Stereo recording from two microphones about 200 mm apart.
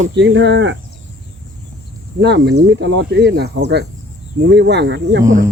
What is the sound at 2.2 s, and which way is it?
Speech, 55° right (ahead or behind).